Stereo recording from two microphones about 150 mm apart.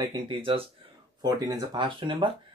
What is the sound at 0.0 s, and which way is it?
Speech, 30° right (ahead or behind).